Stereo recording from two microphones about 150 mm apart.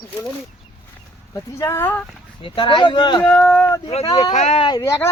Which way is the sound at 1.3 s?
20° left (ahead or behind).